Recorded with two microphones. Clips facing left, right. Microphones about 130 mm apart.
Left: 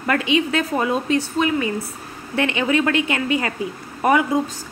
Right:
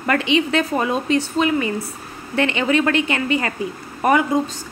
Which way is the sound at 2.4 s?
5° left (ahead or behind).